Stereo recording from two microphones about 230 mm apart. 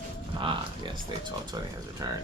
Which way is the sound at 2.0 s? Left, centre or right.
Centre.